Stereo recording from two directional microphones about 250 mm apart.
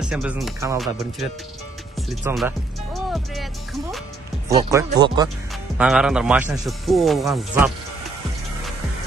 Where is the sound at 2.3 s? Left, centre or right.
Centre.